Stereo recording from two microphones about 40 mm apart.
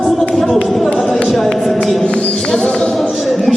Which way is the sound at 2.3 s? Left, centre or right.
Centre.